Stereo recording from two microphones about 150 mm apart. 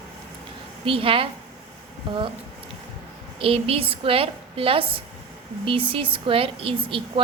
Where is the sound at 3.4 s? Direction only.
40° right (ahead or behind).